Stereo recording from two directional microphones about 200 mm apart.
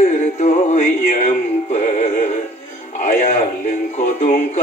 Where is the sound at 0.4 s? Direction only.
35° left (ahead or behind).